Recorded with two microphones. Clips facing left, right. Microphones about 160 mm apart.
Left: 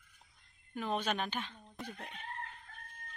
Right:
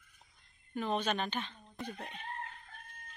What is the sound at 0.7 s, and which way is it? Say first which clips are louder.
Speech: right 2 dB; 5° left (ahead or behind).